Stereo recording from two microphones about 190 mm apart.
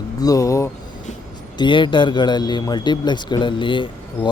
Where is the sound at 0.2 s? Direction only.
20° left (ahead or behind).